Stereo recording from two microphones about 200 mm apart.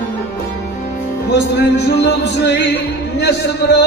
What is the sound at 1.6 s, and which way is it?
Music, 55° left (ahead or behind).